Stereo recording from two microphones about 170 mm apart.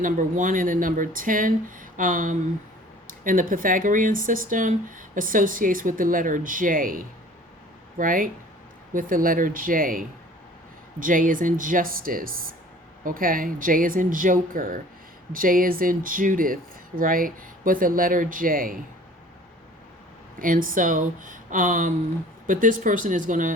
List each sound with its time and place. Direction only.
0.0 s speech: 50° right (ahead or behind)
20.4 s speech: 55° right (ahead or behind)